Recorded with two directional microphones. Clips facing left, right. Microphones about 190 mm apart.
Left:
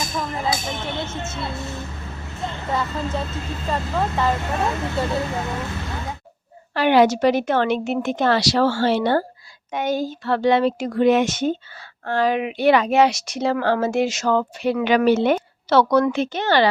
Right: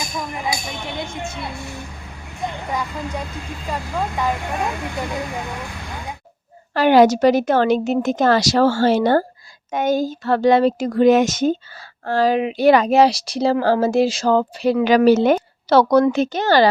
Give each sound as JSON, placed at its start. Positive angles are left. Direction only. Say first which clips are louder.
{"t": 0.0, "sound": "music", "louder": "left 1 dB", "side_deg": -15}
{"t": 0.7, "sound": "speech", "louder": "left 1 dB", "side_deg": -15}
{"t": 5.5, "sound": "vehicle", "louder": "left 3 dB", "side_deg": -15}
{"t": 6.7, "sound": "a woman's voice", "louder": "right 3 dB", "side_deg": -40}